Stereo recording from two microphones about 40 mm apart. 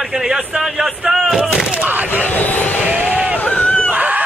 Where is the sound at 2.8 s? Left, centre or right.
Right.